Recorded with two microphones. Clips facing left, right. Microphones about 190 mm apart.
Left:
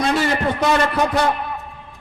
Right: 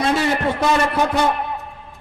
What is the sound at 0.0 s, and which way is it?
Speech, centre (ahead or behind).